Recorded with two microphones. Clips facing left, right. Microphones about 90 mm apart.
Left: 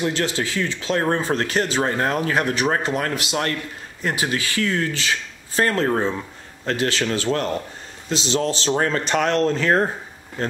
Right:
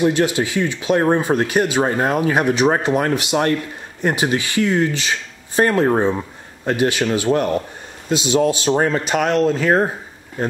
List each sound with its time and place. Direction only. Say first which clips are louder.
0.0 s speech: right 6 dB; 15° right (ahead or behind)